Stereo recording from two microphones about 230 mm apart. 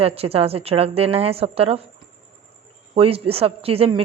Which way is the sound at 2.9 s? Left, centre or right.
Right.